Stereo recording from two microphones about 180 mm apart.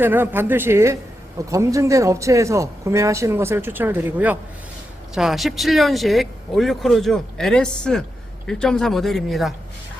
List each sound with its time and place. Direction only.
0.0 s speech: 10° right (ahead or behind)